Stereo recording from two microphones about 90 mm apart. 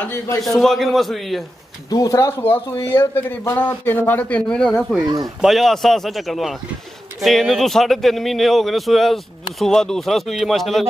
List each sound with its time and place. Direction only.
0.0 s a man's voice: 30° left (ahead or behind)
0.4 s a man's voice: centre (ahead or behind)
1.9 s speech: 40° left (ahead or behind)
3.0 s a man's voice: 25° left (ahead or behind); by 10.9 s centre (ahead or behind)